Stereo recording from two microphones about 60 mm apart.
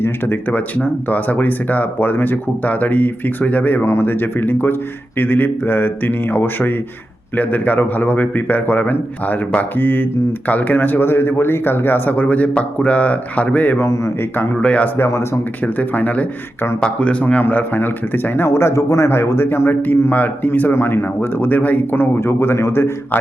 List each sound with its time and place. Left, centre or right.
0.0 s speech: left
13.7 s speech: left
14.3 s speech: left
16.8 s speech: centre
17.4 s speech: left
22.2 s speech: left